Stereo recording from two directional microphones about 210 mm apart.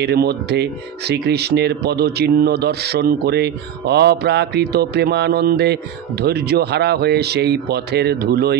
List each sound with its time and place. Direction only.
0.0 s speech: 50° right (ahead or behind)